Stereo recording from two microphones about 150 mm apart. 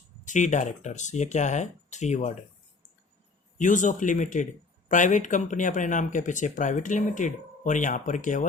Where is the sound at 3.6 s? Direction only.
55° left (ahead or behind).